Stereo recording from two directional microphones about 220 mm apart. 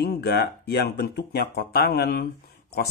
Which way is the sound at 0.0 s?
45° left (ahead or behind).